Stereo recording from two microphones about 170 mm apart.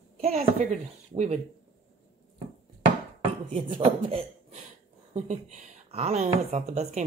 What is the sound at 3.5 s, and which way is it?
Speech, 35° right (ahead or behind).